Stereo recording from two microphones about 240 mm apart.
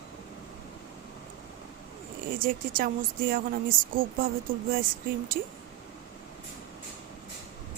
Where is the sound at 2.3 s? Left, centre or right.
Right.